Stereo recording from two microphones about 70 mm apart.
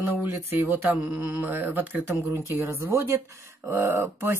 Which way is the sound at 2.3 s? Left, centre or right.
Right.